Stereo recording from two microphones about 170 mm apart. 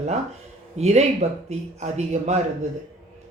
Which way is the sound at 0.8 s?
40° right (ahead or behind).